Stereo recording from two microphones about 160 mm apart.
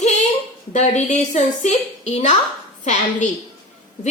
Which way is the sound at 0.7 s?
45° left (ahead or behind).